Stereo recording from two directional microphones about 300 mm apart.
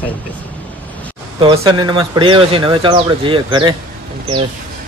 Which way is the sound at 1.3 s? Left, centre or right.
Centre.